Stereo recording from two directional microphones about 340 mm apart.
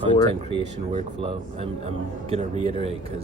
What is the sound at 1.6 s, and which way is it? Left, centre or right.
Speech, centre.